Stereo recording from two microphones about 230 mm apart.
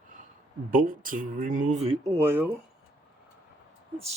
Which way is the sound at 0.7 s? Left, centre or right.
Right.